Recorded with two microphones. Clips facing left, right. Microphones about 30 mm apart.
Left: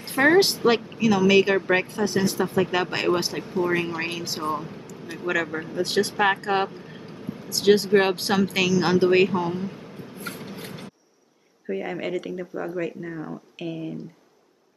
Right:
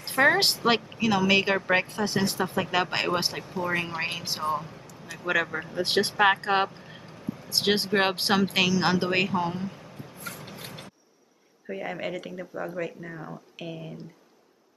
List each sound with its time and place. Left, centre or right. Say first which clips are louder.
0.1 s speech: left 3 dB; centre
3.4 s speech: left 5 dB; centre
4.4 s speech: even; centre
5.8 s speech: left 2 dB; right
6.1 s speech: right 1 dB; centre
7.4 s speech: left 6 dB; right
7.9 s speech: left 3 dB; centre
8.9 s speech: left 6 dB; centre
9.9 s vehicle: left 4 dB; left
10.6 s a sound: left 4 dB; centre
11.6 s speech: left 4 dB; centre